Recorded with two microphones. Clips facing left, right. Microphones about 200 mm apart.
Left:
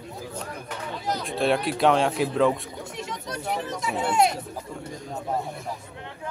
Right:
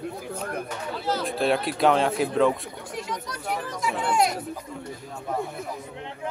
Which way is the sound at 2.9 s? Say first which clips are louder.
Right 2 dB; 25° left (ahead or behind).